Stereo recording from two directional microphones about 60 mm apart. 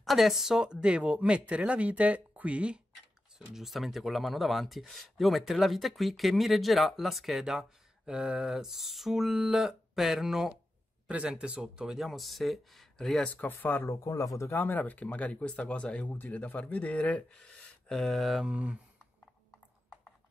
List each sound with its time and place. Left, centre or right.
0.0 s speech: centre
3.3 s speech: centre
11.1 s speech: centre
12.0 s speech: centre
13.2 s speech: left
13.8 s speech: left
14.5 s speech: left; by 18.4 s centre
18.4 s speech: right